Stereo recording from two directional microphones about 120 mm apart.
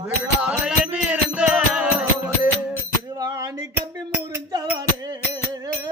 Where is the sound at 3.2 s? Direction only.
30° right (ahead or behind).